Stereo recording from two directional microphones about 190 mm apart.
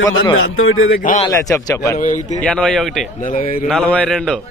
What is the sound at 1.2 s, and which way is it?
Speech, 20° left (ahead or behind).